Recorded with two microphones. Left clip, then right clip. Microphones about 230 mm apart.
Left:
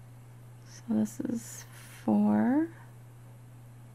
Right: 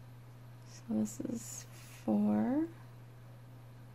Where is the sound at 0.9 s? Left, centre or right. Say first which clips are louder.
Left 6 dB; left.